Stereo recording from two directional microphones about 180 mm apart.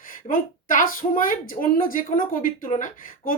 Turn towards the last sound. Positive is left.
turn(degrees=45)  # may be behind; listen again after turning